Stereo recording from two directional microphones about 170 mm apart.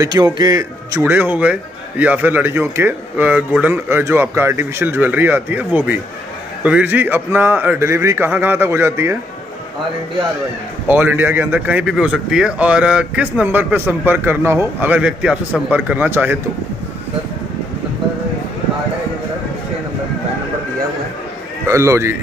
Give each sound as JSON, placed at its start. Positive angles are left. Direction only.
{"t": 0.0, "sound": "a man's voice", "side_deg": -25}
{"t": 10.9, "sound": "a man's voice", "side_deg": -10}
{"t": 21.6, "sound": "a man's voice", "side_deg": -15}